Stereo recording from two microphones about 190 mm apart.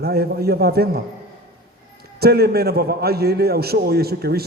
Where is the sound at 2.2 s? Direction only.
55° right (ahead or behind).